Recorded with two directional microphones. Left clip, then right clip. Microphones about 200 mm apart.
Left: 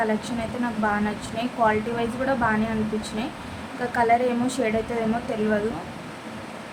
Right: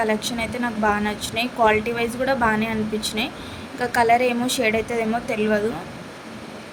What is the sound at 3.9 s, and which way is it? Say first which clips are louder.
Speech: right 3 dB; 35° right (ahead or behind).